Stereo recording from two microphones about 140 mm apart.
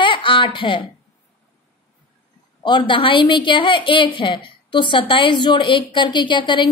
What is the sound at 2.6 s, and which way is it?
A woman's voice, 35° left (ahead or behind).